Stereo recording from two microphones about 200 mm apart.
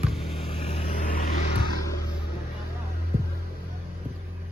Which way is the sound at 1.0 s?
40° left (ahead or behind).